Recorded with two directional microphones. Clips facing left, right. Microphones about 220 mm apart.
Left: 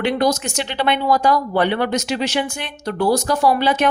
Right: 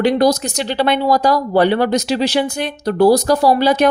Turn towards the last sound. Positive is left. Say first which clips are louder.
# right 4 dB
turn(degrees=-35)  # may be behind; listen again after turning